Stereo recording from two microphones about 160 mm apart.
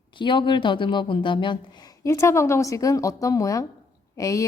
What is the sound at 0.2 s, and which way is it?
A woman's voice, 30° left (ahead or behind).